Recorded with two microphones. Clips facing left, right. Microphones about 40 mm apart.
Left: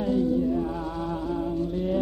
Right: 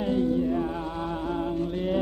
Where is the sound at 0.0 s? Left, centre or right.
Right.